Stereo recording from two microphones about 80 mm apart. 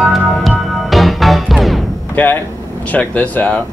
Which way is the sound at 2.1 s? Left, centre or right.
Left.